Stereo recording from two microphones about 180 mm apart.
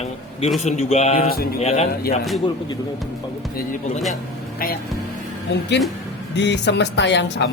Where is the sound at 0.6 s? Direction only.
40° left (ahead or behind).